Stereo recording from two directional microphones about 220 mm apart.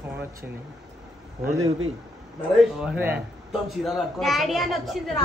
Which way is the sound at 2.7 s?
5° right (ahead or behind).